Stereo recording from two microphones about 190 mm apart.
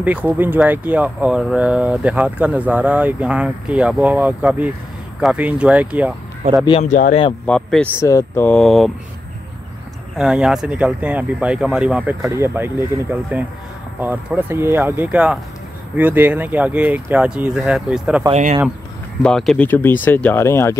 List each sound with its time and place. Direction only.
0.0 s speech: 10° right (ahead or behind)
6.8 s speech: 40° left (ahead or behind)
7.4 s speech: 5° left (ahead or behind)
10.1 s speech: 5° right (ahead or behind)
18.3 s speech: 35° right (ahead or behind)
19.2 s speech: 5° left (ahead or behind)